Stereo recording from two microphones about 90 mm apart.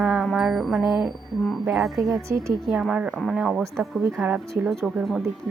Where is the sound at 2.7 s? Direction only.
5° right (ahead or behind).